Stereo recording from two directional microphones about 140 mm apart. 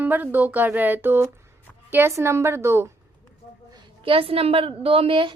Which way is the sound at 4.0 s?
40° right (ahead or behind).